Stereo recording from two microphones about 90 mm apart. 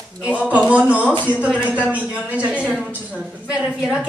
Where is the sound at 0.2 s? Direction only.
15° right (ahead or behind).